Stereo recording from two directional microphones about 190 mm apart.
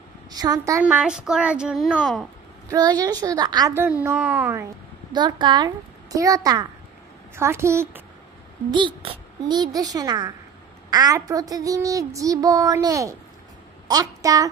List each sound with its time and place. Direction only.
0.3 s a child's voice: 20° right (ahead or behind); by 2.2 s centre (ahead or behind)
2.7 s a child's voice: 20° right (ahead or behind)
5.1 s a child's voice: 25° right (ahead or behind)
8.7 s a child's voice: 25° right (ahead or behind)